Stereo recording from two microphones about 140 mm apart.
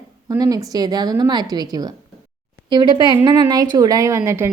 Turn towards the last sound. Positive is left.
turn(degrees=-20)  # may be behind; listen again after turning